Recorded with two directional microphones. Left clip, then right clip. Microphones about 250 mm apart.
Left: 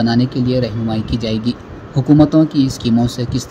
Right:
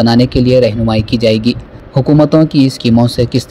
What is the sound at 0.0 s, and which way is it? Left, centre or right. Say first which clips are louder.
Speech: right 7 dB; right.